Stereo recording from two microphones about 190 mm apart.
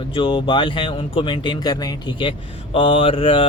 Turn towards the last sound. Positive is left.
turn(degrees=30)  # may be behind; listen again after turning